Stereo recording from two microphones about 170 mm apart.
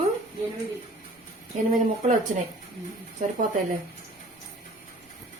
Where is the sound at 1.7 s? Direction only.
45° right (ahead or behind).